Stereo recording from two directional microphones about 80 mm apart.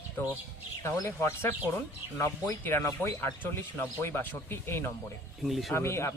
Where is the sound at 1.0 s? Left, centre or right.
Left.